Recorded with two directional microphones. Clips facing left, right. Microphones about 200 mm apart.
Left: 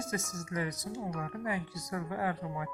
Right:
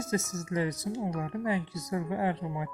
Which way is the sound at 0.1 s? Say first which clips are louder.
Right 8 dB; 30° right (ahead or behind).